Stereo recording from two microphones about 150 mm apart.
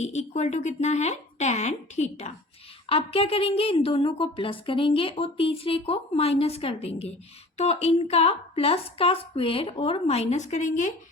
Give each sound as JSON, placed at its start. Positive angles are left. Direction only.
{"t": 0.0, "sound": "a woman's voice", "side_deg": 50}